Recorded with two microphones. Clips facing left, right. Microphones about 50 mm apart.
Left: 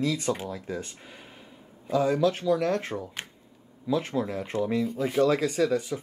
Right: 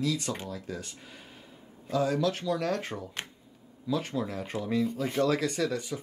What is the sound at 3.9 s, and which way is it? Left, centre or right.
Speech, centre.